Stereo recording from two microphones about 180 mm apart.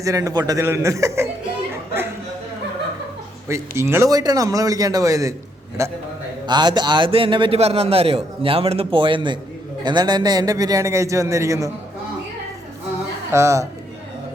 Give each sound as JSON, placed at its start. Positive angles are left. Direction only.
{"t": 0.0, "sound": "a man's voice", "side_deg": -20}
{"t": 3.5, "sound": "a man's voice", "side_deg": -15}
{"t": 13.3, "sound": "a man's voice", "side_deg": -15}